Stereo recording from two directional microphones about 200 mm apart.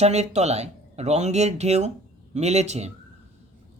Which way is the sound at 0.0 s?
35° right (ahead or behind).